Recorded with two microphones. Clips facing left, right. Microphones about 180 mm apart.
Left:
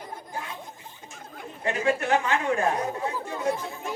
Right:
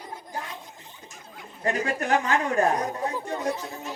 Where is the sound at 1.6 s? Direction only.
40° right (ahead or behind).